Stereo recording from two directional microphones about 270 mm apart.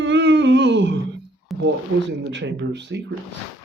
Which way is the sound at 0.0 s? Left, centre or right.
Right.